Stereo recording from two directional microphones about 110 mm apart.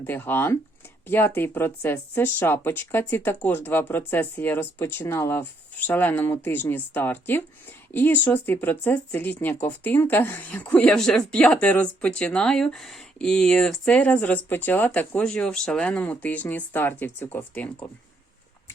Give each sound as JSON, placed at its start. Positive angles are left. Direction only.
{"t": 0.0, "sound": "speech", "side_deg": 20}